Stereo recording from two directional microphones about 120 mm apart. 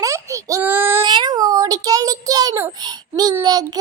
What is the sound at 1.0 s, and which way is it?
Child singing, 40° right (ahead or behind).